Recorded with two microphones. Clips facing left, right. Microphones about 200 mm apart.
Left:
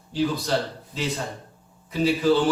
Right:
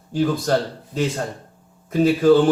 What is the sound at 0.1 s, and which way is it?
Speech, 50° right (ahead or behind).